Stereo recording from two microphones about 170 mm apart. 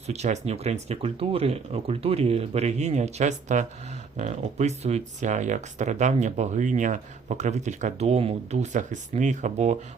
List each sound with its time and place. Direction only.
0.1 s speech: 40° right (ahead or behind)